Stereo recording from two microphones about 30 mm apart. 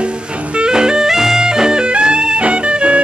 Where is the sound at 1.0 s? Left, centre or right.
Centre.